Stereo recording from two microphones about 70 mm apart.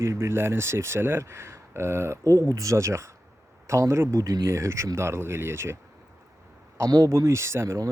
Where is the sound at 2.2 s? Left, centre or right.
Right.